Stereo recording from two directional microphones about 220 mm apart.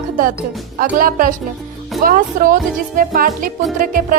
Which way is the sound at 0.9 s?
40° right (ahead or behind).